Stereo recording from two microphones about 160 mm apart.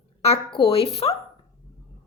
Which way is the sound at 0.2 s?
35° left (ahead or behind).